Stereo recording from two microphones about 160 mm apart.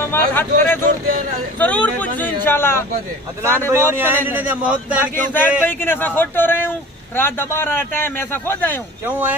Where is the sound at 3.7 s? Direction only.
15° right (ahead or behind).